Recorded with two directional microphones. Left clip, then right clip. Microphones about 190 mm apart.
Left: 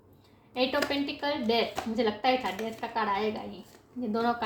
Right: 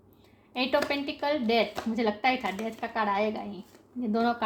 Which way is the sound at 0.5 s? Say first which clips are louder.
Right 1 dB; 45° right (ahead or behind).